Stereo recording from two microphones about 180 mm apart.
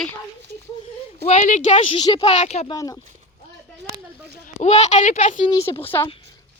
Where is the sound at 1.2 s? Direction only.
45° left (ahead or behind).